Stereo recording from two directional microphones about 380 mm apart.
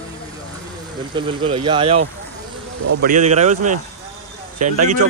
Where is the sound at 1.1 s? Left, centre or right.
Centre.